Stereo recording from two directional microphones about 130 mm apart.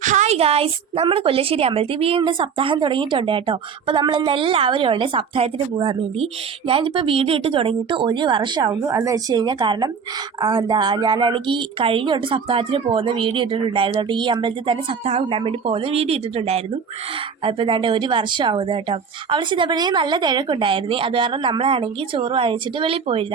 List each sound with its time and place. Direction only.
0.0 s a woman's voice: 70° right (ahead or behind); by 8.8 s 35° right (ahead or behind)
8.9 s speech: 25° right (ahead or behind); by 23.2 s 45° right (ahead or behind)